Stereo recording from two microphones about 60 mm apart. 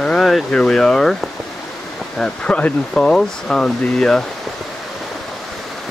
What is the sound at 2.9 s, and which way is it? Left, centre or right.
Speech, centre.